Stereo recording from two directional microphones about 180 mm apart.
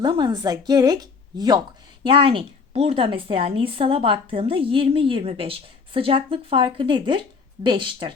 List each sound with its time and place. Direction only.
0.0 s a woman's voice: 25° right (ahead or behind)